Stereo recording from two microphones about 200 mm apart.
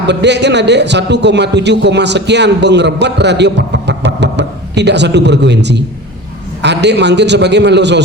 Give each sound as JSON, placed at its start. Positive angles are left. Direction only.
{"t": 0.1, "sound": "a man's voice", "side_deg": -60}